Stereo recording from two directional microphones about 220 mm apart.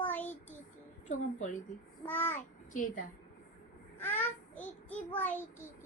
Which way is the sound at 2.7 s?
35° left (ahead or behind).